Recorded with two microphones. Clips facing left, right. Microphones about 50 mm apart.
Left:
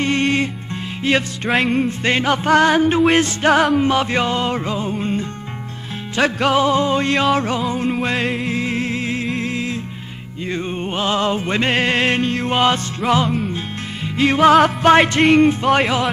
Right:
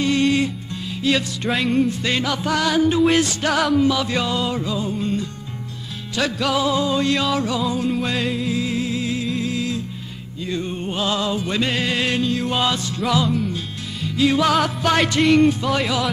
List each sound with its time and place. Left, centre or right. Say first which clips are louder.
0.0 s music: even; left
1.5 s music: left 2 dB; left
1.9 s music: left 4 dB; left
14.1 s music: left 5 dB; left